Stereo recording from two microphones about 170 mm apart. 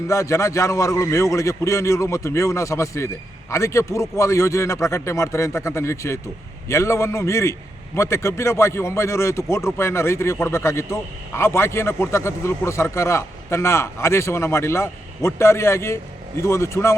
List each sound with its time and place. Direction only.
0.1 s a man's voice: 15° left (ahead or behind)